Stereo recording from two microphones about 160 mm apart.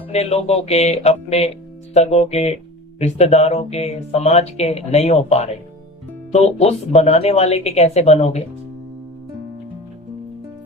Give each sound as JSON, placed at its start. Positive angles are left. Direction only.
{"t": 0.1, "sound": "speech", "side_deg": 40}